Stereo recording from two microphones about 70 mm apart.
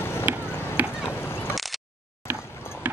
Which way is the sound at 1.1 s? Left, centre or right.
Left.